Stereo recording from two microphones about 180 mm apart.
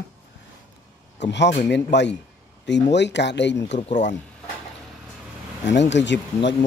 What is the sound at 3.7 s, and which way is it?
Speech, 40° left (ahead or behind).